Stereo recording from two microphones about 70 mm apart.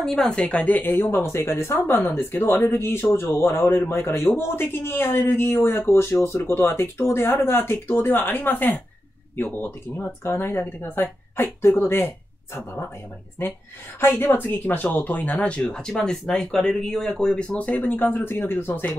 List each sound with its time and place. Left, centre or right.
0.0 s speech: centre; by 12.1 s left
13.9 s speech: left